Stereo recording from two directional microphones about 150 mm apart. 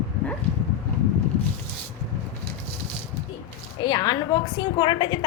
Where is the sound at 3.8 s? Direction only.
30° left (ahead or behind).